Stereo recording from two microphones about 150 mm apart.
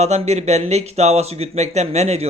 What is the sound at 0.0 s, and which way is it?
Speech, 45° right (ahead or behind).